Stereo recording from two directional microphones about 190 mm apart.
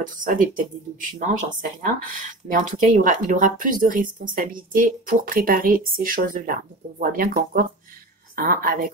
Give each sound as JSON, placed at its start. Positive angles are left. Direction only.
{"t": 0.0, "sound": "speech", "side_deg": -45}